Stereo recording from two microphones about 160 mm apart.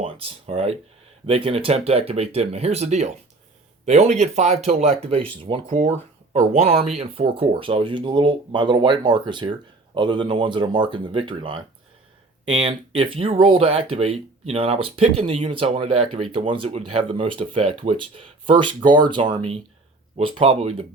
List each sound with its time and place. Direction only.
0.0 s speech: 35° right (ahead or behind)
5.0 s speech: 35° right (ahead or behind)